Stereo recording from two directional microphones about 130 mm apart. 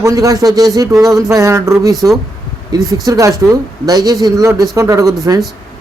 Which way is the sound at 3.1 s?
25° right (ahead or behind).